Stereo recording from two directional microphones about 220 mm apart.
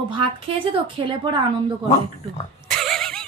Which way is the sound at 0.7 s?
20° right (ahead or behind).